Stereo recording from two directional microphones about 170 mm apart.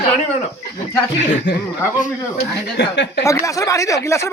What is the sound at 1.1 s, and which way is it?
Speech, 90° left.